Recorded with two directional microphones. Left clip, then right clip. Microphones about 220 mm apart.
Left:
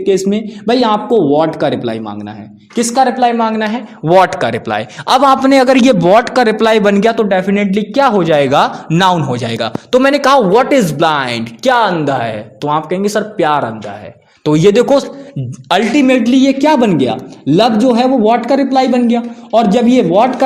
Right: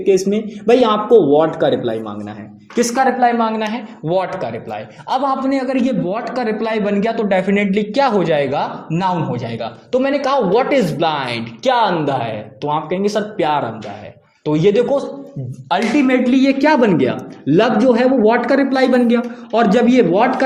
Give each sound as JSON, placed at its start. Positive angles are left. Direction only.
{"t": 0.1, "sound": "a man's voice", "side_deg": 40}